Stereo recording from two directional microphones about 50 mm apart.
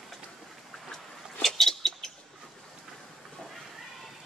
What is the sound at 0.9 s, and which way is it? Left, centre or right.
Rodents, centre.